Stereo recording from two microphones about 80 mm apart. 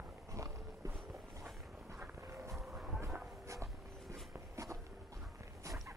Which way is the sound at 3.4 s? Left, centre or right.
Right.